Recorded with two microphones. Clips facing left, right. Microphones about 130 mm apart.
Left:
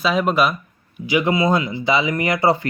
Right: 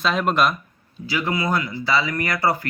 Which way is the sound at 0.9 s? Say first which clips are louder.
Left 6 dB; 20° left (ahead or behind).